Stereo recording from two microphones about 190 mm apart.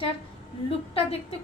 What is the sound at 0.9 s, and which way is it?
Speech, 30° left (ahead or behind).